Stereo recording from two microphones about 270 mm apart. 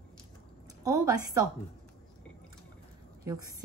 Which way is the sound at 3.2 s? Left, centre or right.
Centre.